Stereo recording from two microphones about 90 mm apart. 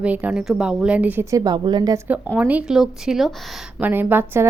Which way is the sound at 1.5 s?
55° right (ahead or behind).